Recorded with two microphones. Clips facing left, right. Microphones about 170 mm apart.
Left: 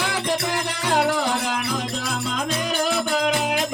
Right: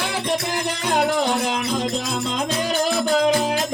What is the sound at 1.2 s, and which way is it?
Music, 25° right (ahead or behind).